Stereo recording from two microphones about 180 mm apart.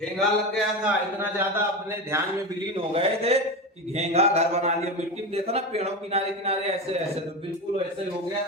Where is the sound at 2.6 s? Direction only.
30° right (ahead or behind).